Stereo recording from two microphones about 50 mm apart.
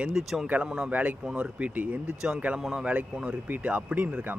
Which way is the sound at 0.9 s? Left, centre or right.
Right.